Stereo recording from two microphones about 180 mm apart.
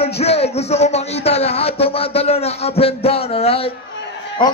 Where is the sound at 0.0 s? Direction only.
35° left (ahead or behind).